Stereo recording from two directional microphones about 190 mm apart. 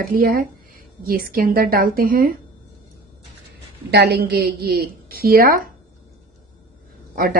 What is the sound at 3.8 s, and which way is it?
Speech, 55° right (ahead or behind).